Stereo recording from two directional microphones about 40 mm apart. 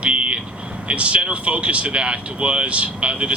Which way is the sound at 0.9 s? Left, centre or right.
Right.